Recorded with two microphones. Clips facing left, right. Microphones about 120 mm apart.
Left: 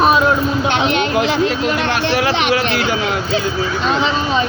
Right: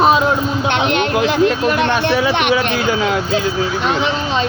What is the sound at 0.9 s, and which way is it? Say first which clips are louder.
Speech: even; 55° right (ahead or behind).